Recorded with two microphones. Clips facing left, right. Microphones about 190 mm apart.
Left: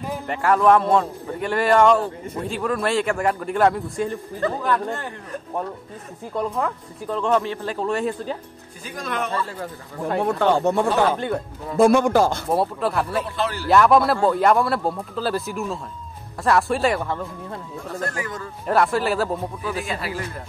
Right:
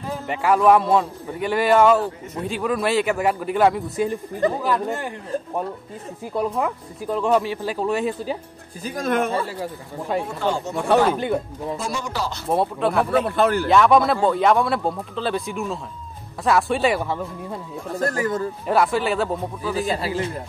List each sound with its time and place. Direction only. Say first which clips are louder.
0.3 s speech: right 1 dB; 5° right (ahead or behind)
6.3 s speech: right 1 dB; 10° right (ahead or behind)
8.8 s speech: right 6 dB; 45° right (ahead or behind)
10.1 s speech: left 4 dB; 60° left (ahead or behind)
11.1 s speech: right 2 dB; 10° right (ahead or behind)
11.7 s speech: left 14 dB; 55° left (ahead or behind)
12.4 s speech: right 1 dB; centre (ahead or behind)
13.2 s speech: right 7 dB; 55° right (ahead or behind)
13.7 s speech: left 3 dB; centre (ahead or behind)
18.0 s speech: right 9 dB; 40° right (ahead or behind)
18.7 s speech: even; centre (ahead or behind)
19.9 s a man's voice: right 5 dB; 30° right (ahead or behind)